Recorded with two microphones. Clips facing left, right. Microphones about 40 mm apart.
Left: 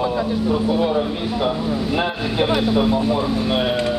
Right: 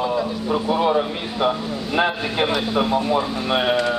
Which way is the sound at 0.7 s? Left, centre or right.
Centre.